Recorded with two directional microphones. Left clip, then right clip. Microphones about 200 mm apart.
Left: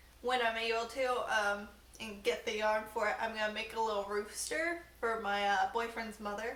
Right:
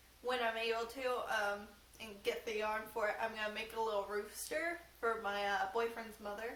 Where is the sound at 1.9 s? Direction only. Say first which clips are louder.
Left 5 dB; 10° right (ahead or behind).